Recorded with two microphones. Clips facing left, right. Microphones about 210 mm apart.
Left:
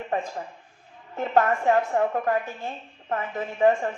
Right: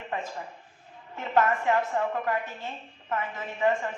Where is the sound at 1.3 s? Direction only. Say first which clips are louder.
Left 3 dB; 40° left (ahead or behind).